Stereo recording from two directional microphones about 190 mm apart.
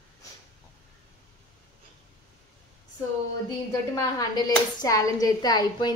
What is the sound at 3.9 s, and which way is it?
Speech, 20° left (ahead or behind).